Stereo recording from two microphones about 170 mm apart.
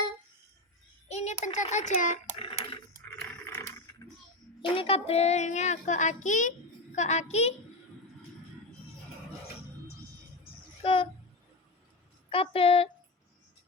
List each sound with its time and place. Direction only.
1.0 s a child's voice: 40° left (ahead or behind)
2.4 s a sound: 30° left (ahead or behind)
3.2 s a sound: 10° left (ahead or behind)
4.6 s a child's voice: 30° left (ahead or behind)
10.8 s a woman's voice: 30° left (ahead or behind)
12.3 s a woman's voice: 35° left (ahead or behind)